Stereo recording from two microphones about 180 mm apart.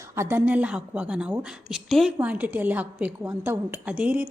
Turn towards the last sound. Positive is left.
turn(degrees=-5)  # may be behind; listen again after turning